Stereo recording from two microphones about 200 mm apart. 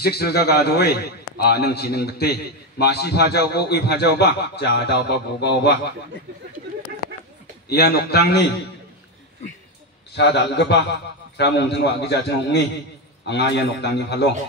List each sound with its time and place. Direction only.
0.0 s a man's voice: 50° left (ahead or behind)
7.7 s a man's voice: 55° left (ahead or behind)
10.1 s a man's voice: 60° left (ahead or behind)